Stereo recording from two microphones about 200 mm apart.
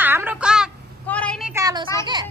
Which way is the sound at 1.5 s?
15° right (ahead or behind).